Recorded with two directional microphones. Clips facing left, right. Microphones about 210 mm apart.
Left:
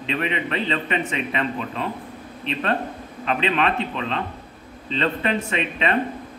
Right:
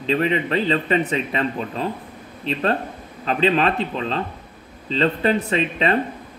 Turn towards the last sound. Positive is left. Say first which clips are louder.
# right 3 dB
turn(degrees=-35)  # may be behind; listen again after turning